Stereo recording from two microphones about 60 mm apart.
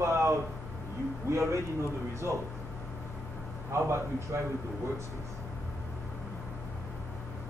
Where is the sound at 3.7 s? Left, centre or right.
Right.